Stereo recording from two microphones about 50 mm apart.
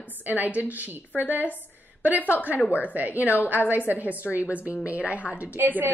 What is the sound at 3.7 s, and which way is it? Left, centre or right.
A woman's voice, right.